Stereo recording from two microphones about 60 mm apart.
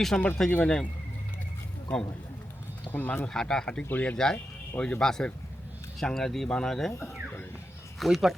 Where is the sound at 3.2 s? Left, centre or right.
Centre.